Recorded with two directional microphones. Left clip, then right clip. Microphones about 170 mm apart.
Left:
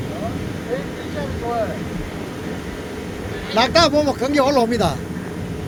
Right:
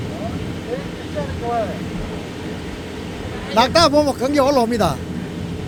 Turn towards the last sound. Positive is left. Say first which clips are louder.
# right 1 dB
turn(degrees=-10)  # may be behind; listen again after turning